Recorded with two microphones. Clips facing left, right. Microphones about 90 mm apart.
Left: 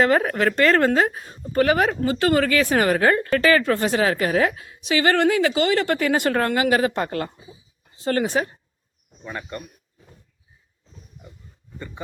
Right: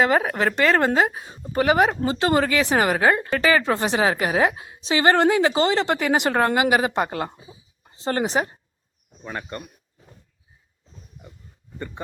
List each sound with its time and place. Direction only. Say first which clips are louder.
0.0 s a woman's voice: left 1 dB; 10° right (ahead or behind)
7.9 s a woman's voice: left 1 dB; 30° right (ahead or behind)